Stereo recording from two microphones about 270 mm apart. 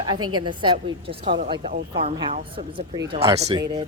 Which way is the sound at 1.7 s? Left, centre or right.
Right.